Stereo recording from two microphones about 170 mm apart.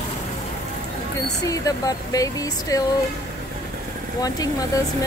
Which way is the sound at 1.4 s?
20° left (ahead or behind).